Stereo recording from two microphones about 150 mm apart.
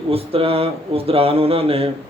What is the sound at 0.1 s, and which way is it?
Speech, 40° right (ahead or behind).